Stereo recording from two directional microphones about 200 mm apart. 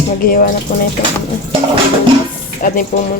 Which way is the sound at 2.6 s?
40° left (ahead or behind).